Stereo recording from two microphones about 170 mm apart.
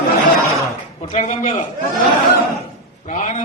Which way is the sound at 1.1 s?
45° left (ahead or behind).